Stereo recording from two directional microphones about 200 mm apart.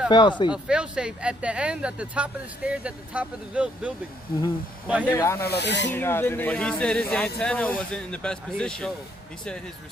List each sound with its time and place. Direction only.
0.1 s speech: 20° left (ahead or behind)
0.5 s speech: 5° right (ahead or behind)
5.1 s speech: 15° left (ahead or behind)
5.5 s speech: 60° left (ahead or behind)
5.9 s speech: 10° left (ahead or behind)